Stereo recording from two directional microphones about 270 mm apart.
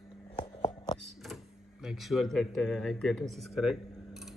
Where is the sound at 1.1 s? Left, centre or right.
Centre.